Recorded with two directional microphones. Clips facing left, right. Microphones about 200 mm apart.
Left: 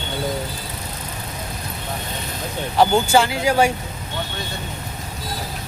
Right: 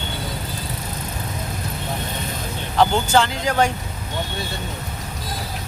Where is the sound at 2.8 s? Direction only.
10° left (ahead or behind).